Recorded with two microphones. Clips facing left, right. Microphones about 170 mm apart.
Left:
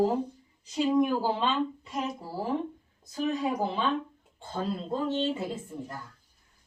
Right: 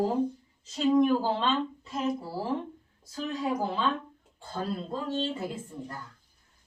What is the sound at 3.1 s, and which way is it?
Speech, 20° left (ahead or behind).